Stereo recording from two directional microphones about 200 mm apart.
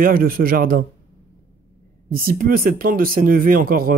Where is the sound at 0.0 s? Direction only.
45° right (ahead or behind).